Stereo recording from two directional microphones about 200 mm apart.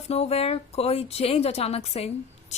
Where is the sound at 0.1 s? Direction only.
30° left (ahead or behind).